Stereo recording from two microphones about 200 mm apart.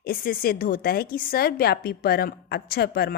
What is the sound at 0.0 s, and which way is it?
Speech, 45° left (ahead or behind).